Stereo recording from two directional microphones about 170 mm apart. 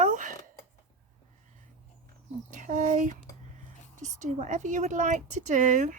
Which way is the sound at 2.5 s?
50° right (ahead or behind).